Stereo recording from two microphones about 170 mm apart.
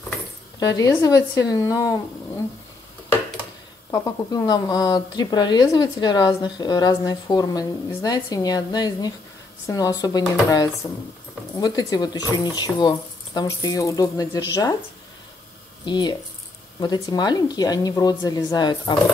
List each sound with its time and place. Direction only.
0.7 s speech: 20° left (ahead or behind)
3.9 s speech: 20° left (ahead or behind)
11.5 s speech: 20° left (ahead or behind)
15.8 s speech: 25° left (ahead or behind)